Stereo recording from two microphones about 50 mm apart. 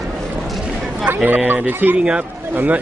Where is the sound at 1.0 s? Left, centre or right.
Right.